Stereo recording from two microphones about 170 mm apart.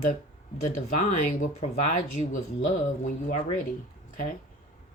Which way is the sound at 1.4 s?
45° left (ahead or behind).